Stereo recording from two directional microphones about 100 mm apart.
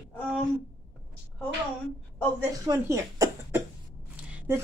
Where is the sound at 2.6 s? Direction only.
35° right (ahead or behind).